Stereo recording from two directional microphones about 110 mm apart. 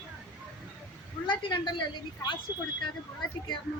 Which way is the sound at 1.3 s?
45° left (ahead or behind).